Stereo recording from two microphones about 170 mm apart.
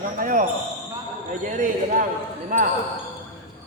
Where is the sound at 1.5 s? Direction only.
50° right (ahead or behind).